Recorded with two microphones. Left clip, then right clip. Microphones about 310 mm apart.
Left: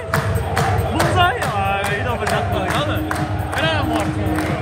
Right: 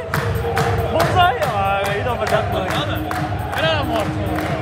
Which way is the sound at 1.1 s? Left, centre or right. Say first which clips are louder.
Right 1 dB; right.